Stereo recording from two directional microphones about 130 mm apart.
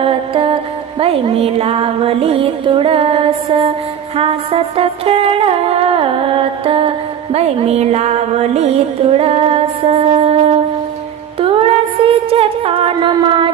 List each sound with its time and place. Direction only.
0.0 s music: 45° right (ahead or behind)